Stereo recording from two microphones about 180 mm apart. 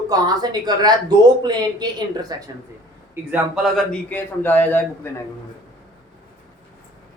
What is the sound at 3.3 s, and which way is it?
Speech, centre (ahead or behind).